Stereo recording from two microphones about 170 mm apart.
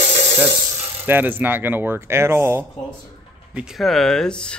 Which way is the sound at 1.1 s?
10° right (ahead or behind).